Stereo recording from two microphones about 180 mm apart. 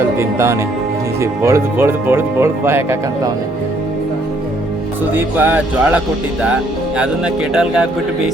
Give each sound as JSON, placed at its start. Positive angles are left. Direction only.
{"t": 0.2, "sound": "speech", "side_deg": -15}
{"t": 5.1, "sound": "speech", "side_deg": -10}
{"t": 7.5, "sound": "a man's voice", "side_deg": -5}